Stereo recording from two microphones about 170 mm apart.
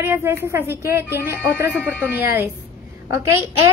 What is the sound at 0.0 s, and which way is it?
Speech, 15° right (ahead or behind).